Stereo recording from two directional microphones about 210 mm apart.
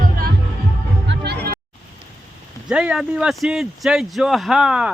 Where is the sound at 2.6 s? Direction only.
5° right (ahead or behind).